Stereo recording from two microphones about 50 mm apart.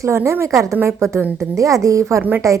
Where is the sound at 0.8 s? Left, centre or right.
Right.